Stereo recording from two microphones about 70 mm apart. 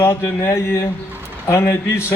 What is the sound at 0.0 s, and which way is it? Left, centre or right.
A man's voice, left.